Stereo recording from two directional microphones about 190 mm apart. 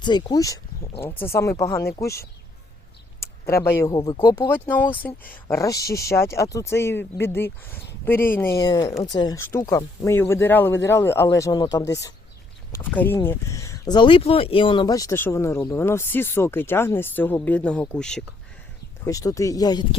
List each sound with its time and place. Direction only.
0.0 s speech: 25° left (ahead or behind); by 18.2 s 5° left (ahead or behind)
19.0 s speech: 15° left (ahead or behind)